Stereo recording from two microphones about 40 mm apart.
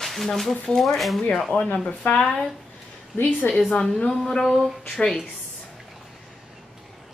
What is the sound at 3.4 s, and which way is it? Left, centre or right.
Speech, left.